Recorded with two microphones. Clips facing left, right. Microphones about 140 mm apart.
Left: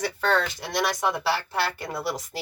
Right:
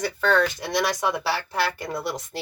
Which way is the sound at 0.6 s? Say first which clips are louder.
Right 2 dB; centre (ahead or behind).